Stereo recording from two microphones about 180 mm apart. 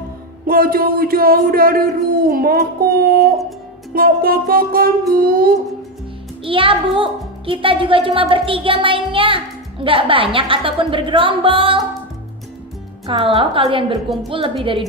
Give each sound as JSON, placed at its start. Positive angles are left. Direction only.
{"t": 0.5, "sound": "speech", "side_deg": -55}
{"t": 3.9, "sound": "music", "side_deg": -55}
{"t": 6.4, "sound": "a child's voice", "side_deg": -30}
{"t": 13.0, "sound": "a child's voice", "side_deg": -30}